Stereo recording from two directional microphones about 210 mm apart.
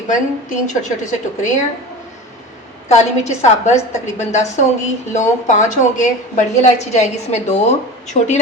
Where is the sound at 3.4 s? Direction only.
30° left (ahead or behind).